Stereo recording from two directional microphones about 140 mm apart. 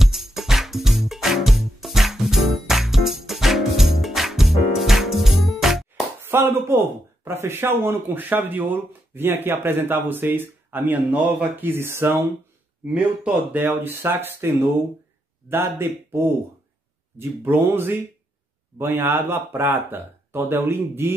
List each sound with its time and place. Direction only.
0.0 s music: centre (ahead or behind)
6.2 s speech: 15° right (ahead or behind)